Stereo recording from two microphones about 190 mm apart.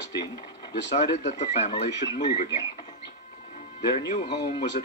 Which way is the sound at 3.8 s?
35° left (ahead or behind).